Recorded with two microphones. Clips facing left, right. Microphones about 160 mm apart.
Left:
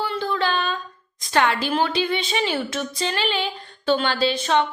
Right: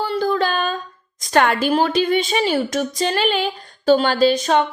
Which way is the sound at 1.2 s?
50° right (ahead or behind).